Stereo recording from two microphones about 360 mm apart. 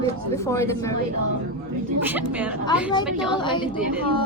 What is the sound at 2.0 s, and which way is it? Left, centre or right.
Speech, centre.